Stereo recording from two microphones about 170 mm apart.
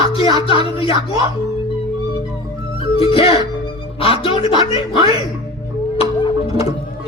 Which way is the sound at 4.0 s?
35° left (ahead or behind).